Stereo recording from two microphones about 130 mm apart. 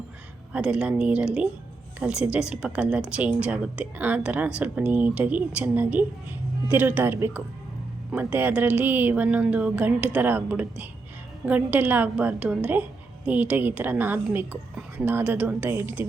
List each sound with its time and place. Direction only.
0.5 s a woman's voice: 5° right (ahead or behind)